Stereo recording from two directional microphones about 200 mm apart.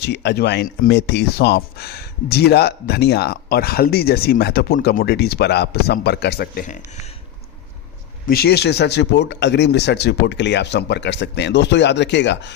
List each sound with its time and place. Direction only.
0.0 s speech: 60° left (ahead or behind); by 7.0 s 45° left (ahead or behind)
8.3 s speech: 55° left (ahead or behind)